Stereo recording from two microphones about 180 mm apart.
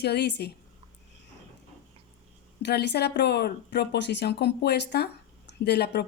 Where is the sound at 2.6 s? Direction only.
70° left (ahead or behind).